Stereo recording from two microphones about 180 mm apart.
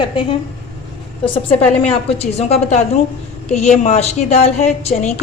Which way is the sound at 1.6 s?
35° left (ahead or behind).